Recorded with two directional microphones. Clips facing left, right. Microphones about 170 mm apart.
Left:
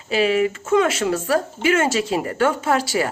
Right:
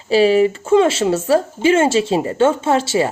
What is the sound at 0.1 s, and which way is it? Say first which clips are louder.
Speech: right 6 dB; 30° right (ahead or behind).